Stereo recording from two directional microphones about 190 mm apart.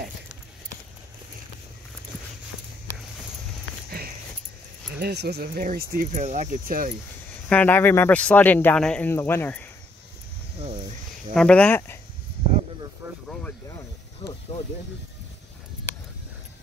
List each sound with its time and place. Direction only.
5.0 s speech: 60° right (ahead or behind)
7.4 s speech: 10° left (ahead or behind)
11.3 s speech: 5° left (ahead or behind)
13.0 s a sound: 15° right (ahead or behind)
13.7 s snake: 15° left (ahead or behind)